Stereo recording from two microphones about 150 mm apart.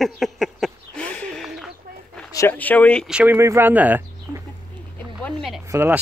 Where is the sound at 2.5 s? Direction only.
10° left (ahead or behind).